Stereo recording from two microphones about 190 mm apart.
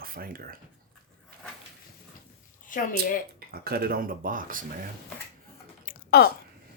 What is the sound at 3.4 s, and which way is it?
Speech, 50° right (ahead or behind).